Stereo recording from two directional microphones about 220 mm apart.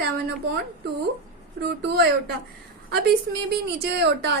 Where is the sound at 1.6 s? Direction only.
50° right (ahead or behind).